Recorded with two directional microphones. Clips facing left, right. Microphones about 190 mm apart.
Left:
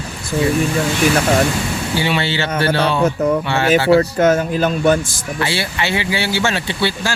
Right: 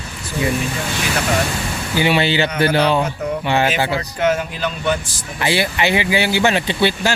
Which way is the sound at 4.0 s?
45° left (ahead or behind).